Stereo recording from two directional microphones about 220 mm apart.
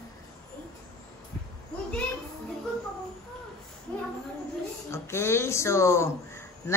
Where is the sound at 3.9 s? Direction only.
5° left (ahead or behind).